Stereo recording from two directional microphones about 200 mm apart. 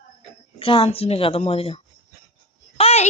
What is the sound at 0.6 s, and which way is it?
A woman's voice, 30° left (ahead or behind).